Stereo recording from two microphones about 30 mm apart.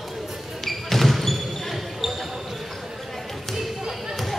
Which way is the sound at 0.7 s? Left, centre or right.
Centre.